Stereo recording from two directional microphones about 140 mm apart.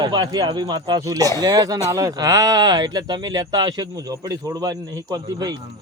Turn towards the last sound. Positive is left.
turn(degrees=-30)  # may be behind; listen again after turning